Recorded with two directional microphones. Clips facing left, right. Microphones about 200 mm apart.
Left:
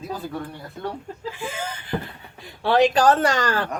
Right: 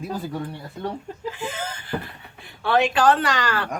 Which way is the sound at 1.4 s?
10° left (ahead or behind).